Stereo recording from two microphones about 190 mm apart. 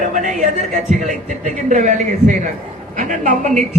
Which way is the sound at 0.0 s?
40° right (ahead or behind).